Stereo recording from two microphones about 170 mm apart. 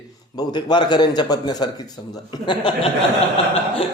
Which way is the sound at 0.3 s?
25° left (ahead or behind).